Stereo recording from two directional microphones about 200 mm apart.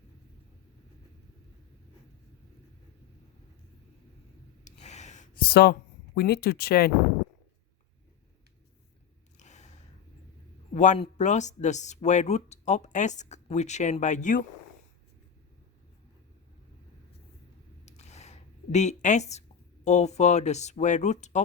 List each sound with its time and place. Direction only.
4.6 s a sound: 35° left (ahead or behind); by 5.7 s 50° left (ahead or behind)
6.1 s speech: 50° left (ahead or behind)
9.4 s gasp: 35° left (ahead or behind)
10.8 s speech: 35° left (ahead or behind)
17.8 s speech: 35° left (ahead or behind)